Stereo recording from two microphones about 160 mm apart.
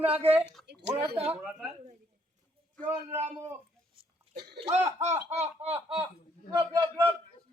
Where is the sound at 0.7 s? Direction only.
90° right.